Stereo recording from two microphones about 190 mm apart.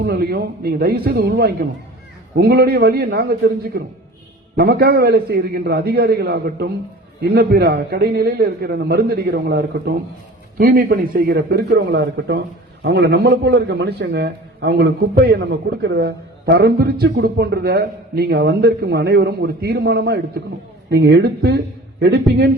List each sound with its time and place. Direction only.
0.0 s a man's voice: 55° right (ahead or behind)